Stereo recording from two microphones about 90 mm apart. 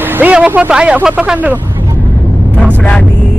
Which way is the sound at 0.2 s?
15° right (ahead or behind).